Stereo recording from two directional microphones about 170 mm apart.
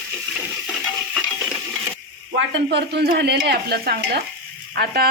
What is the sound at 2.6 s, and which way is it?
A woman's voice, 75° right (ahead or behind).